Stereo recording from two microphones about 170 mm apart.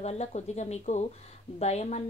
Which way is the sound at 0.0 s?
40° left (ahead or behind).